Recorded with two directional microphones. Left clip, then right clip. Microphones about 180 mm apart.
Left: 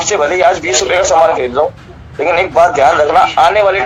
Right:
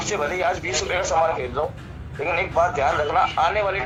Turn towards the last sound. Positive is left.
turn(degrees=40)  # may be behind; listen again after turning